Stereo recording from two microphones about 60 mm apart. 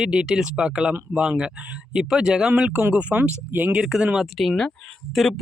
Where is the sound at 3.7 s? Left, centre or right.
Centre.